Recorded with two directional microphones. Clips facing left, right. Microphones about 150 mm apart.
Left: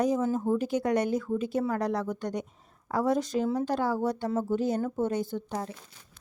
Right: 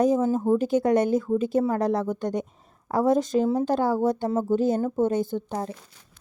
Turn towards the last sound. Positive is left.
turn(degrees=-30)  # may be behind; listen again after turning